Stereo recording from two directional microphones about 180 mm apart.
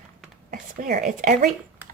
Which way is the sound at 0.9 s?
50° right (ahead or behind).